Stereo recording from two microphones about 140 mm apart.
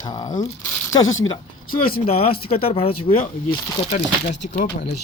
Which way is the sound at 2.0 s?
45° left (ahead or behind).